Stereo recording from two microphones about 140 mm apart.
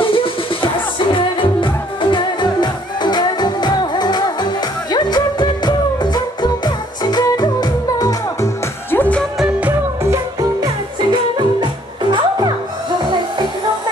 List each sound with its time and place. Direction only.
0.0 s music: 40° left (ahead or behind)
8.9 s music: 10° left (ahead or behind)
10.1 s music: 30° right (ahead or behind)